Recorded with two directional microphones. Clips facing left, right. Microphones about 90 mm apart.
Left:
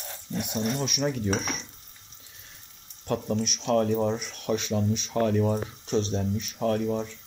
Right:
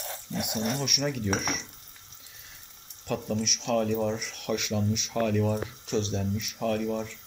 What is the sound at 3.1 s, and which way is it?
Speech, 40° left (ahead or behind).